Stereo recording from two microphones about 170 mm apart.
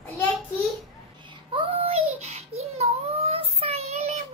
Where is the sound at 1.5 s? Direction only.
35° right (ahead or behind).